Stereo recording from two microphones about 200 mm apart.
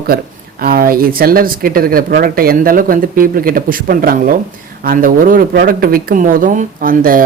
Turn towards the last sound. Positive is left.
turn(degrees=-45)  # may be behind; listen again after turning